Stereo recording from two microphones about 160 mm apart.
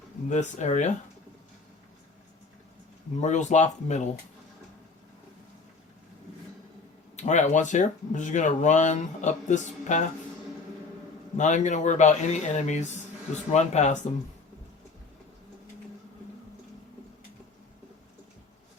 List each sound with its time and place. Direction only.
0.3 s speech: 50° left (ahead or behind)
3.2 s speech: 45° left (ahead or behind)
7.2 s speech: 45° left (ahead or behind)
11.3 s speech: 50° left (ahead or behind)